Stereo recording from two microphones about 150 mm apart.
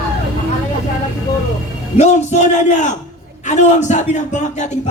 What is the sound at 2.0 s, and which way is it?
Speech, 50° left (ahead or behind).